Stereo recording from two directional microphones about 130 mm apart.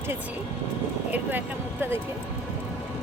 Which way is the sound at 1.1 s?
15° right (ahead or behind).